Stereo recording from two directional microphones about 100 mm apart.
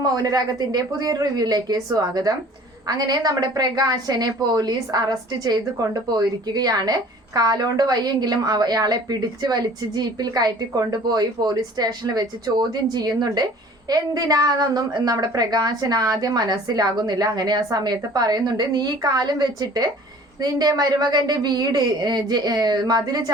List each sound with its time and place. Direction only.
0.0 s a woman's voice: 40° right (ahead or behind)